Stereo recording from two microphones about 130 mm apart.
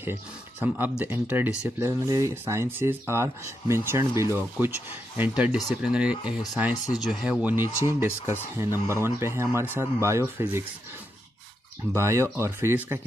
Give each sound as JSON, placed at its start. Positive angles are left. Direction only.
{"t": 0.0, "sound": "speech", "side_deg": -15}
{"t": 11.9, "sound": "speech", "side_deg": -20}